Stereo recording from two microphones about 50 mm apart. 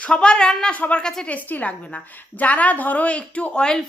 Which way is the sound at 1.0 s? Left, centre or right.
Centre.